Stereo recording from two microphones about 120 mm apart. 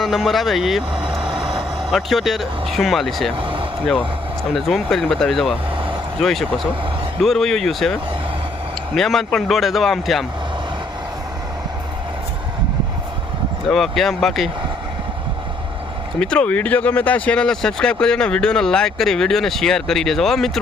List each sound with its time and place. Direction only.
0.0 s speech: centre (ahead or behind)
3.3 s vehicle: 45° right (ahead or behind)
4.5 s speech: centre (ahead or behind)
5.7 s vehicle: 45° right (ahead or behind)
6.1 s speech: centre (ahead or behind)
9.0 s speech: centre (ahead or behind)
13.7 s speech: centre (ahead or behind)
16.2 s speech: 10° left (ahead or behind)